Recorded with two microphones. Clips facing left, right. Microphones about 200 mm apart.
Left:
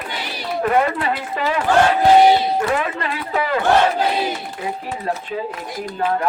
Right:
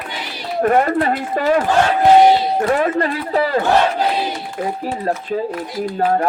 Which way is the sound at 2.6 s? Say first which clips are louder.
Right 5 dB; 40° right (ahead or behind).